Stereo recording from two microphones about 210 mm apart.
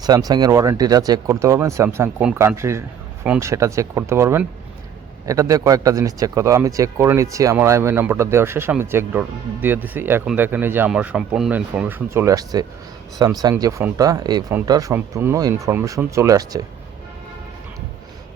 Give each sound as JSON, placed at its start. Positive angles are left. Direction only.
{"t": 0.0, "sound": "a man's voice", "side_deg": -20}